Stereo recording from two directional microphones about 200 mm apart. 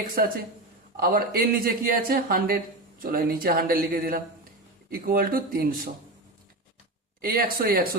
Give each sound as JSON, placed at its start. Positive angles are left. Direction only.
{"t": 0.2, "sound": "speech", "side_deg": -45}
{"t": 7.2, "sound": "speech", "side_deg": -45}